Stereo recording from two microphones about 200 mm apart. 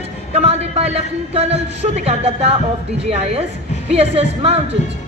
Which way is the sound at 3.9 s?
30° right (ahead or behind).